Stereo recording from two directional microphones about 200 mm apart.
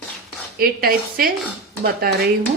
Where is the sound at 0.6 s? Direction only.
50° right (ahead or behind).